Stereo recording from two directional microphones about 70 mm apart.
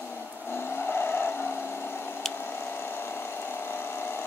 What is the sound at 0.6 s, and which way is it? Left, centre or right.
Vehicle, left.